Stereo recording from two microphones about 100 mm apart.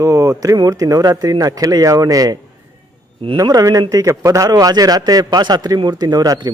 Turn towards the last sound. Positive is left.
turn(degrees=-40)  # may be behind; listen again after turning